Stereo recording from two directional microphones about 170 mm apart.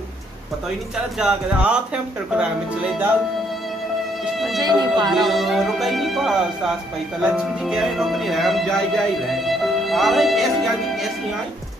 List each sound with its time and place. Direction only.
1.2 s speech: 5° right (ahead or behind)
4.6 s speech: 25° right (ahead or behind)
5.1 s speech: centre (ahead or behind)